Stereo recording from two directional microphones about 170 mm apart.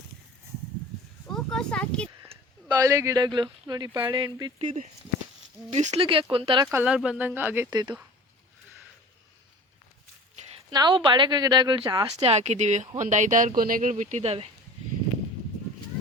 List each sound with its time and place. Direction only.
1.3 s a sound: 5° left (ahead or behind)
2.3 s speech: 25° right (ahead or behind)
5.7 s speech: 35° right (ahead or behind)
6.7 s speech: 5° right (ahead or behind)
7.7 s speech: 25° right (ahead or behind)
10.7 s speech: 25° right (ahead or behind)
12.2 s speech: 40° right (ahead or behind)